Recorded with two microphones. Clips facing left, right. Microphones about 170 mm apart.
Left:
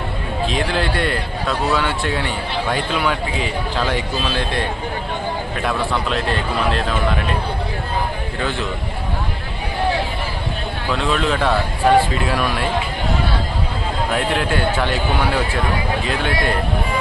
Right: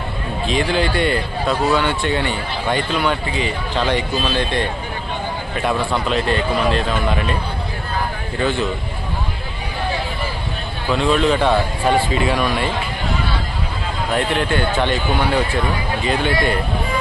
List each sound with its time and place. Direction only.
0.4 s a man's voice: centre (ahead or behind)
6.1 s a man's voice: centre (ahead or behind)
10.9 s a man's voice: centre (ahead or behind)
14.1 s a man's voice: centre (ahead or behind)